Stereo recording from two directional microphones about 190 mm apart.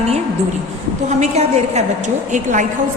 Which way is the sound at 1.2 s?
35° right (ahead or behind).